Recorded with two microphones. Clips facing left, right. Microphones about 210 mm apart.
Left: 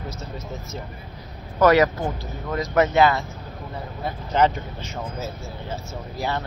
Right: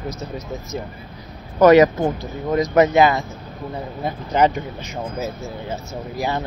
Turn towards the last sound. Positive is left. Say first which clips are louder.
# right 4 dB
turn(degrees=-15)  # may be behind; listen again after turning